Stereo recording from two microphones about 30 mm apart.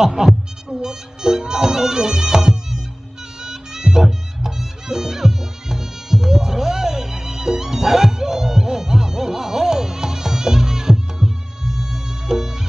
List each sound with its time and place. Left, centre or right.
0.0 s heart sounds: centre
0.7 s music: right